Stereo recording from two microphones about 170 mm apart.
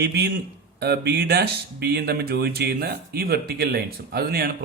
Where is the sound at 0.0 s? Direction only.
80° right.